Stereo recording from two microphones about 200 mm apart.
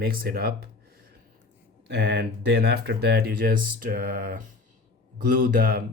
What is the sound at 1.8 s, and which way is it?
Speech, 60° right (ahead or behind).